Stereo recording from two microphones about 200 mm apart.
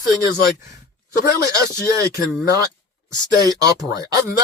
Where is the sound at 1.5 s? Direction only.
15° right (ahead or behind).